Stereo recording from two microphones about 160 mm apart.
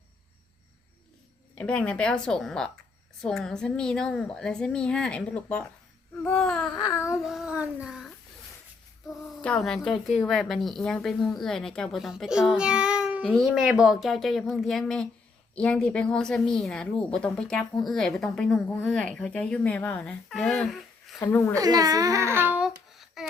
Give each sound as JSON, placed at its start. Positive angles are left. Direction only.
{"t": 1.5, "sound": "a woman's voice", "side_deg": 5}
{"t": 7.2, "sound": "child singing", "side_deg": 0}
{"t": 9.4, "sound": "a woman's voice", "side_deg": 5}
{"t": 21.2, "sound": "speech", "side_deg": 20}
{"t": 21.5, "sound": "babbling", "side_deg": -25}